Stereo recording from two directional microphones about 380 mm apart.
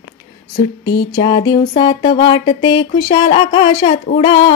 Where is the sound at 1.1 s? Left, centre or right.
Centre.